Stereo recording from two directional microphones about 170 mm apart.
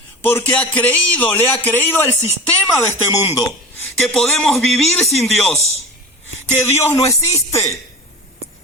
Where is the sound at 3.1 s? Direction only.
20° left (ahead or behind).